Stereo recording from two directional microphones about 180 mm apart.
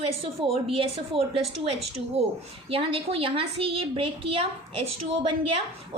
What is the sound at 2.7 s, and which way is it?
A woman's voice, 35° right (ahead or behind).